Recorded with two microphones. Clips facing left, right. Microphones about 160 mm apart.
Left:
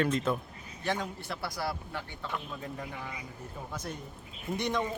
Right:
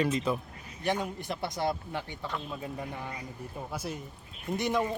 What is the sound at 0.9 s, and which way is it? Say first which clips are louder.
A man's voice: right 3 dB; 20° right (ahead or behind).